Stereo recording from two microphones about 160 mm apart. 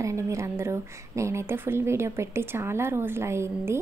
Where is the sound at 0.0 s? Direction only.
20° right (ahead or behind).